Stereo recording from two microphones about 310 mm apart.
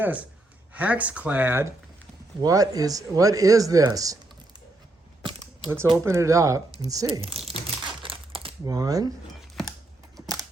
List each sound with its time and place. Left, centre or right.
0.7 s speech: centre
5.7 s speech: centre
7.5 s crumpling: centre